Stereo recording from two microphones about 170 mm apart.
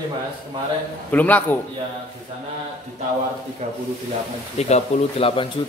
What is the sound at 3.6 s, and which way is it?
Speech, 45° right (ahead or behind).